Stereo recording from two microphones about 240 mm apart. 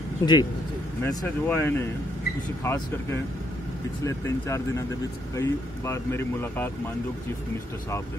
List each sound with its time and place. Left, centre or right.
0.2 s speech: centre